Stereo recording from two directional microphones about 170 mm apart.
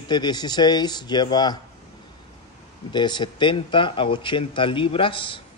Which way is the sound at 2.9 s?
25° left (ahead or behind).